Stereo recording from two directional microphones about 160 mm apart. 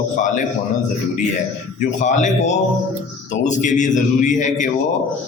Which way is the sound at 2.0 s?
50° left (ahead or behind).